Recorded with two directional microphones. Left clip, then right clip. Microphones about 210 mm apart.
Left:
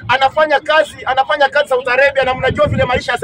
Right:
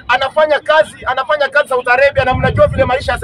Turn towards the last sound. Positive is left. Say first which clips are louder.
# right 1 dB
turn(degrees=-5)  # may be behind; listen again after turning